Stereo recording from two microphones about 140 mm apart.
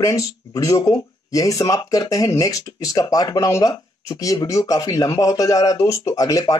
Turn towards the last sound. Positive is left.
turn(degrees=25)  # may be behind; listen again after turning